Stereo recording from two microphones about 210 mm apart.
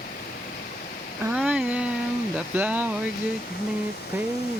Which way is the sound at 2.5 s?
10° right (ahead or behind).